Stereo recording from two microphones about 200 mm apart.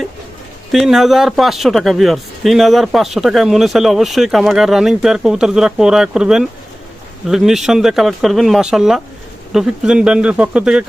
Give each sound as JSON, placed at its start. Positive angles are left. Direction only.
{"t": 0.7, "sound": "speech", "side_deg": 0}